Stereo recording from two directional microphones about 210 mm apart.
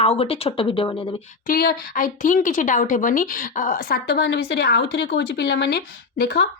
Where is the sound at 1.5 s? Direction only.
45° left (ahead or behind).